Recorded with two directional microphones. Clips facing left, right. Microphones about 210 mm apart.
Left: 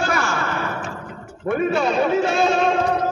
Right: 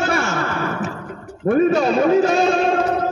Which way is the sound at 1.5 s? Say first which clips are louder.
Right 5 dB; 40° right (ahead or behind).